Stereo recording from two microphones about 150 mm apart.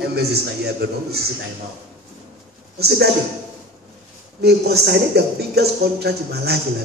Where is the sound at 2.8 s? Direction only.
90° right.